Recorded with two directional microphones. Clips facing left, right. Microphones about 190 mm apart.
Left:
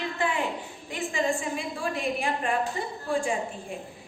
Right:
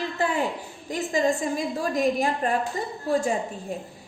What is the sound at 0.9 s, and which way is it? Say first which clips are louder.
Speech: right 4 dB; 40° right (ahead or behind).